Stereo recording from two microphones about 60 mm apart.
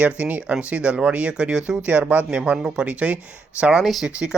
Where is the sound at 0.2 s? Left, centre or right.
Right.